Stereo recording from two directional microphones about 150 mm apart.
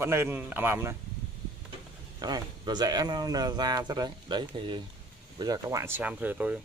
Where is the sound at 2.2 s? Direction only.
25° right (ahead or behind); by 6.6 s 10° right (ahead or behind).